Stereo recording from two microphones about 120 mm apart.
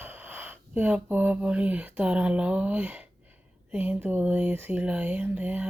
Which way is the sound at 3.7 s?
15° right (ahead or behind).